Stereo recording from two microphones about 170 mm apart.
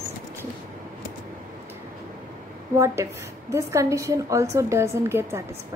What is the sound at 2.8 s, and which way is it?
A woman's voice, 15° right (ahead or behind).